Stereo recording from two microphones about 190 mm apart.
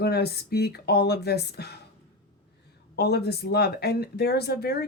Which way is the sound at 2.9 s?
60° left (ahead or behind).